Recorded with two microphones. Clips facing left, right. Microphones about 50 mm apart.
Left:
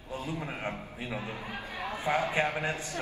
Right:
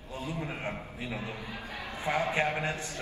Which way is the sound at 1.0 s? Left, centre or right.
Left.